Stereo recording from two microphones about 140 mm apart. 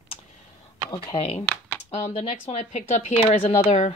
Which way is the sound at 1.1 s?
45° left (ahead or behind).